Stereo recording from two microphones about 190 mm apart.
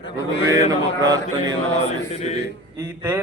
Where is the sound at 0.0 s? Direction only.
70° left (ahead or behind).